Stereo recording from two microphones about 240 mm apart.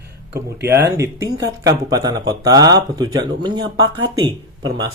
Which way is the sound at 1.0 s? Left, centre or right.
Centre.